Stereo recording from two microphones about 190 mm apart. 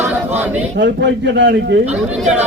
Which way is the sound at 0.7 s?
65° right (ahead or behind).